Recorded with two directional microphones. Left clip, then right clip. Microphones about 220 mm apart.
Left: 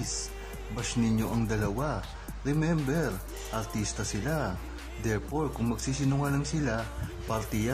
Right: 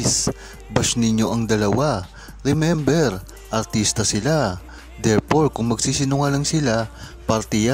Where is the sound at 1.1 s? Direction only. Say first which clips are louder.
Right 11 dB; 40° right (ahead or behind).